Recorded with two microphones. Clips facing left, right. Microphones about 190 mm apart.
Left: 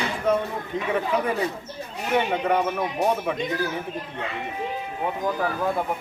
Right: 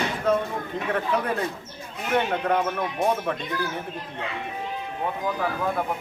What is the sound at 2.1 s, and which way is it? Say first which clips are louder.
Speech: left 1 dB; 5° left (ahead or behind).